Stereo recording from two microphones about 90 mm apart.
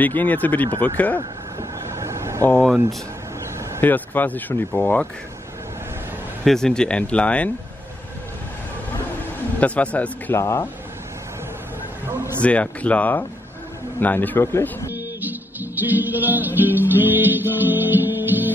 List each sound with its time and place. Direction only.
0.0 s speech: 20° left (ahead or behind)
0.7 s speech: 65° right (ahead or behind)
0.9 s speech: 20° left (ahead or behind)
1.6 s a sound: 35° right (ahead or behind)
3.8 s speech: 20° left (ahead or behind)
6.4 s speech: 5° left (ahead or behind)
9.6 s speech: 15° left (ahead or behind)
10.3 s speech: 30° left (ahead or behind)
12.4 s speech: 15° left (ahead or behind)
15.2 s music: 20° right (ahead or behind)